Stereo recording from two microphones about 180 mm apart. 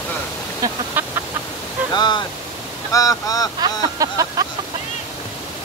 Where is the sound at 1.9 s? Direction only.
25° left (ahead or behind).